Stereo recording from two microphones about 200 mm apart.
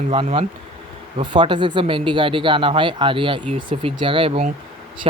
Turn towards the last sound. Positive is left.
turn(degrees=-30)  # may be behind; listen again after turning